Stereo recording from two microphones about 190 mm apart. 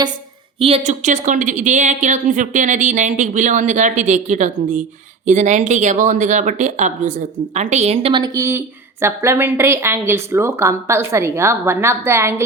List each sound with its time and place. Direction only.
0.6 s a woman's voice: 35° right (ahead or behind); by 12.5 s 15° right (ahead or behind)